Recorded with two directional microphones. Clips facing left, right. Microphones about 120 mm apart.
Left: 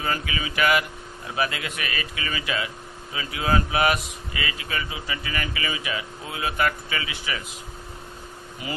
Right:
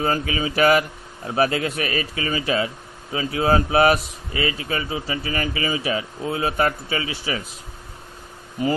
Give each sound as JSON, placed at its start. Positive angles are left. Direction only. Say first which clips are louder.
{"t": 0.0, "sound": "speech", "louder": "right 6 dB", "side_deg": -35}
{"t": 8.6, "sound": "speech", "louder": "right 12 dB", "side_deg": -40}